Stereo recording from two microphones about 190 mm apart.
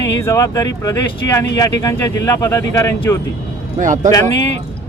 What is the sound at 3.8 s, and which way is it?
Speech, 40° right (ahead or behind).